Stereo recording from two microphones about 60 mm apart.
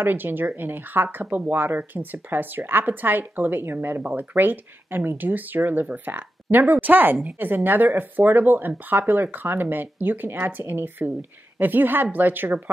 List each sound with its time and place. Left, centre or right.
0.0 s speech: right
4.0 s speech: right